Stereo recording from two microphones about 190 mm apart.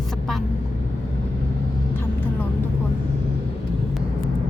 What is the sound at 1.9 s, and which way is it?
Vehicle, 10° left (ahead or behind).